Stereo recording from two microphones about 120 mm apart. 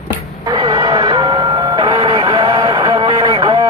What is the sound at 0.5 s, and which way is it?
Vehicle, 35° right (ahead or behind).